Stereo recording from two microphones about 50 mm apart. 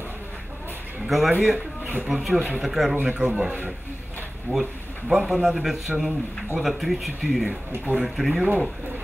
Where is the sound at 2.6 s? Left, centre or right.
Centre.